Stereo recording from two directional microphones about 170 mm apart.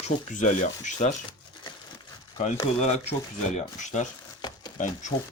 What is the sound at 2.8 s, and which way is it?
Speech, 45° left (ahead or behind).